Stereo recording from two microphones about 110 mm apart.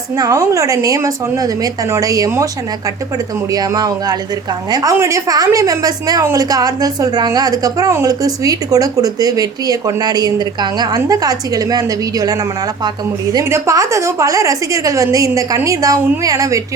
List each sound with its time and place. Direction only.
0.2 s speech: 30° right (ahead or behind)
3.5 s a woman's voice: 35° right (ahead or behind)